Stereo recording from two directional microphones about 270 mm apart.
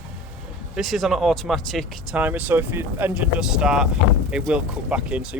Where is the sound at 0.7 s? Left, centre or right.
Centre.